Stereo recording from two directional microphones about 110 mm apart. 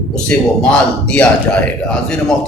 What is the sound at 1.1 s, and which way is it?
Speech, 10° left (ahead or behind).